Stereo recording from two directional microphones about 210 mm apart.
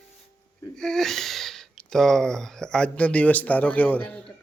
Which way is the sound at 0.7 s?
Centre (ahead or behind).